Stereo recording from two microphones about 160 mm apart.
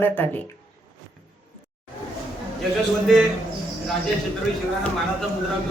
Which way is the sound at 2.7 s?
Centre (ahead or behind).